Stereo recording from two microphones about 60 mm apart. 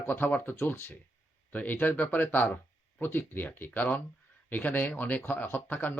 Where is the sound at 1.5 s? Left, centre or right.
Left.